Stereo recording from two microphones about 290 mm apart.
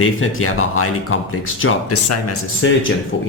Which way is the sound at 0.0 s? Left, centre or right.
Left.